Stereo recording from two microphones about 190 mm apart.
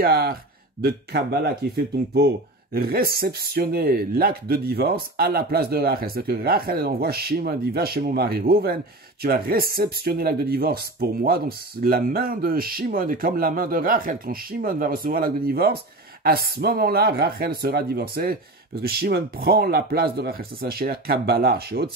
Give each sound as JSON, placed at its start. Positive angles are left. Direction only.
{"t": 0.0, "sound": "speech", "side_deg": -55}